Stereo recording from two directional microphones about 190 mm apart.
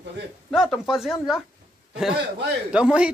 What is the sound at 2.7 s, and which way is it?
Speech, 5° right (ahead or behind).